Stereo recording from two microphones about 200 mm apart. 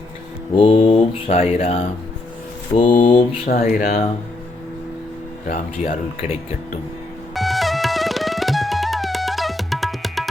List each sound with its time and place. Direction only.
0.5 s mantra: 25° left (ahead or behind)
3.4 s speech: 45° left (ahead or behind)
5.5 s speech: 45° left (ahead or behind)
7.3 s music: centre (ahead or behind)